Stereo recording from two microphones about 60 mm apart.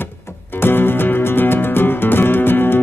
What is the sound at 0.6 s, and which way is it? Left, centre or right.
Music, left.